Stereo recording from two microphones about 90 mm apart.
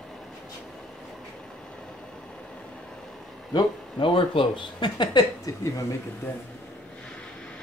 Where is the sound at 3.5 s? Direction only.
65° left (ahead or behind).